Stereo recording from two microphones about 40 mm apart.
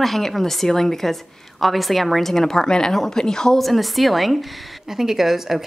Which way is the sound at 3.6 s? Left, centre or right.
Centre.